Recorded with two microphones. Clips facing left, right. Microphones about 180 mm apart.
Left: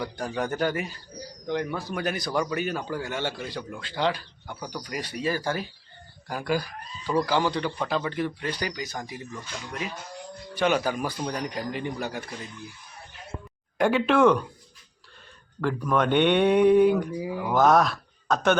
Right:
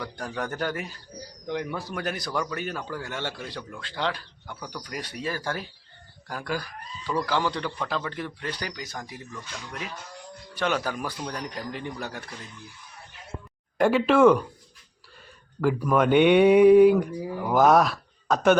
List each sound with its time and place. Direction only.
0.0 s a man's voice: 10° left (ahead or behind)
7.1 s speech: 20° left (ahead or behind)
7.9 s a man's voice: 5° left (ahead or behind)
13.7 s a man's voice: centre (ahead or behind)
15.6 s a man's voice: 5° right (ahead or behind)
17.5 s speech: 10° right (ahead or behind)